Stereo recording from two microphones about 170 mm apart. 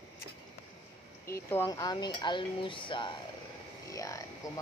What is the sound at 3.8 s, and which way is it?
Speech, 20° left (ahead or behind).